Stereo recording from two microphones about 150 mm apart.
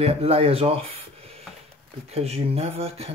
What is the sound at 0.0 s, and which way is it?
Speech, 40° right (ahead or behind).